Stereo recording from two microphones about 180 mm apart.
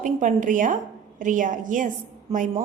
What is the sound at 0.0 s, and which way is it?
A woman's voice, 45° right (ahead or behind).